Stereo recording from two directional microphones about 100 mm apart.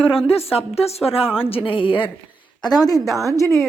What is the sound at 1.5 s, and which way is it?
Speech, 65° left (ahead or behind).